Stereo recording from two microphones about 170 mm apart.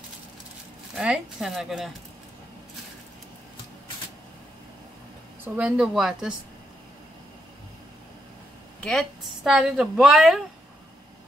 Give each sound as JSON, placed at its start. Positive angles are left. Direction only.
{"t": 0.9, "sound": "speech", "side_deg": -5}
{"t": 5.4, "sound": "speech", "side_deg": -5}
{"t": 8.8, "sound": "speech", "side_deg": 0}